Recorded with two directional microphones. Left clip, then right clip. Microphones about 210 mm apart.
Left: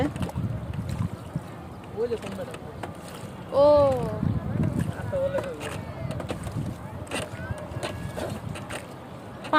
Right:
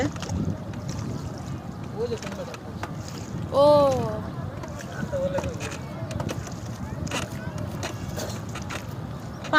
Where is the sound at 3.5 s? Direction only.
10° right (ahead or behind).